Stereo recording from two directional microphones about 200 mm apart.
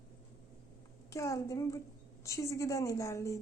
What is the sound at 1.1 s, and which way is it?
Speech, 15° left (ahead or behind).